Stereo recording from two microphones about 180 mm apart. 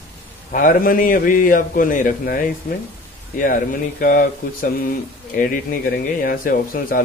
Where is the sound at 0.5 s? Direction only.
50° left (ahead or behind).